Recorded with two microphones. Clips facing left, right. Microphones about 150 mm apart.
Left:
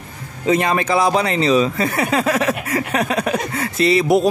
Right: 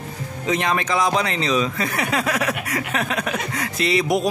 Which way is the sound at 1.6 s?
30° left (ahead or behind).